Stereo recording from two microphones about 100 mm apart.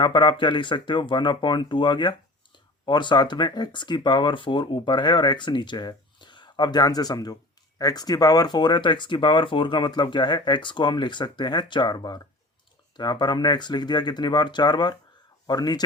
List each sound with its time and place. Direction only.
0.0 s speech: 50° left (ahead or behind)